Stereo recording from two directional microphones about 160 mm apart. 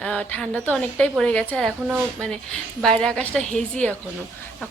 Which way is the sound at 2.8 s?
5° left (ahead or behind).